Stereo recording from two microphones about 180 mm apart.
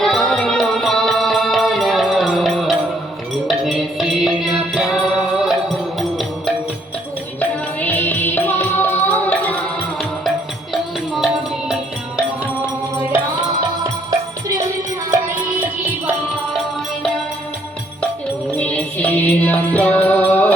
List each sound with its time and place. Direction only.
0.0 s music: 5° left (ahead or behind)
7.8 s music: 10° left (ahead or behind)
18.5 s music: 10° left (ahead or behind)